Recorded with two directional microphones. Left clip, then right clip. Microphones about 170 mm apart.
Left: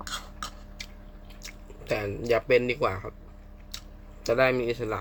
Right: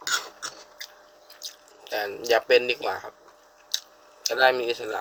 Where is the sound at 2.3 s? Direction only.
20° left (ahead or behind).